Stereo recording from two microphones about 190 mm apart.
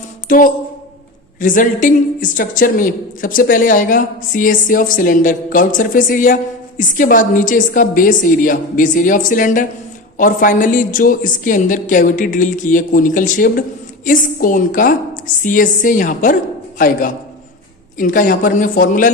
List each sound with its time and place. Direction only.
0.3 s a woman's voice: 45° left (ahead or behind)